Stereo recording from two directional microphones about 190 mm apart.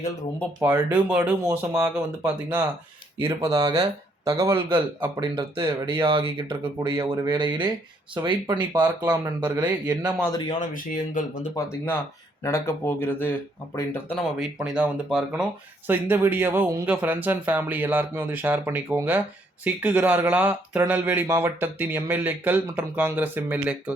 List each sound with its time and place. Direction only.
0.6 s speech: 10° right (ahead or behind)
3.4 s speech: 20° right (ahead or behind)
10.6 s speech: 45° left (ahead or behind)
11.5 s speech: 15° left (ahead or behind)
14.3 s speech: 5° right (ahead or behind)